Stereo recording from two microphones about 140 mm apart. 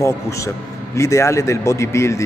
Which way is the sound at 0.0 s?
20° left (ahead or behind).